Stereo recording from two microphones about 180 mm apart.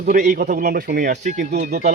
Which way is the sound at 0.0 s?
45° right (ahead or behind).